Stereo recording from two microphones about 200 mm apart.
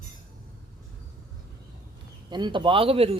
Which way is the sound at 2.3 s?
20° right (ahead or behind).